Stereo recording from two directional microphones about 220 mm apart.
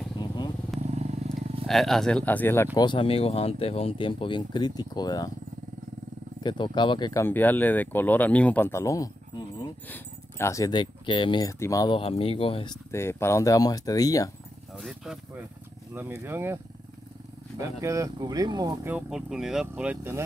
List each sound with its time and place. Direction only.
0.2 s motorcycle: 20° left (ahead or behind)
0.7 s wild animals: 30° right (ahead or behind)
1.7 s speech: centre (ahead or behind); by 5.3 s 20° left (ahead or behind)
6.4 s speech: 20° left (ahead or behind)
12.9 s speech: 10° left (ahead or behind)
14.7 s speech: centre (ahead or behind)
17.6 s speech: 15° right (ahead or behind)
18.9 s speech: 5° right (ahead or behind)